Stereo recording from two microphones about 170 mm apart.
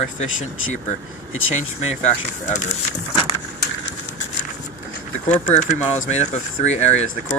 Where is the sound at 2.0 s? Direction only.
45° left (ahead or behind).